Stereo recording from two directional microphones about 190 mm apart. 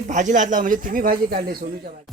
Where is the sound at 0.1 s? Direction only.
40° right (ahead or behind).